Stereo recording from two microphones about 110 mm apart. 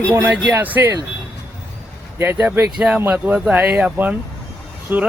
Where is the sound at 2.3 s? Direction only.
10° right (ahead or behind).